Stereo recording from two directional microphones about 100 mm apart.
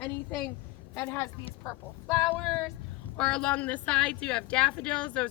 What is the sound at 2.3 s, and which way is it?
A woman's voice, 10° left (ahead or behind).